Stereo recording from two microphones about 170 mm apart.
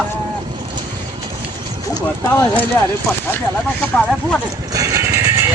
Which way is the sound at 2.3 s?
10° left (ahead or behind).